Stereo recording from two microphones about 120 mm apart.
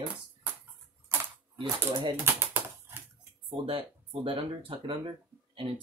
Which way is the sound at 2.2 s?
20° right (ahead or behind).